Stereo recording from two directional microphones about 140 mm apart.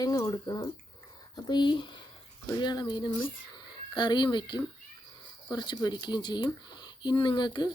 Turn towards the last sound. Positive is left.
turn(degrees=30)  # may be behind; listen again after turning